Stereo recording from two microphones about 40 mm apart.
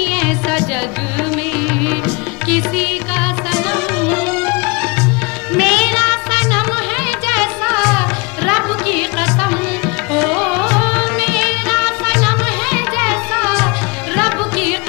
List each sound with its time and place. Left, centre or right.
0.0 s music: centre
1.9 s music: centre